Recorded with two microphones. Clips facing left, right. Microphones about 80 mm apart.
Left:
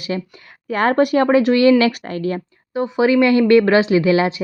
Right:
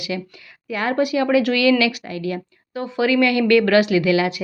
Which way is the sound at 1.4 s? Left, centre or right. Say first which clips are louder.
Left 4 dB; left.